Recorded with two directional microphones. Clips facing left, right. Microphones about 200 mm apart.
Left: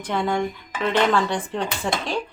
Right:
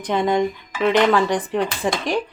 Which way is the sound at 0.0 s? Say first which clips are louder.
Right 4 dB; 20° right (ahead or behind).